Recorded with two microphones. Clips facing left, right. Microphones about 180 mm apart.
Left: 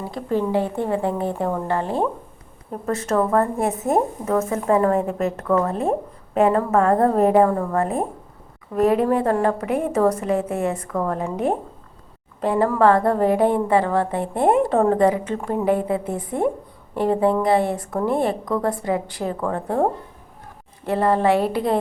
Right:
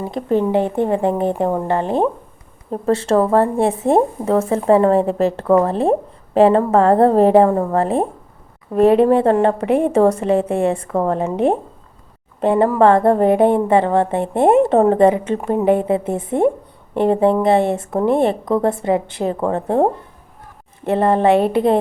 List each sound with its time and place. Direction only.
0.0 s a woman's voice: 20° right (ahead or behind)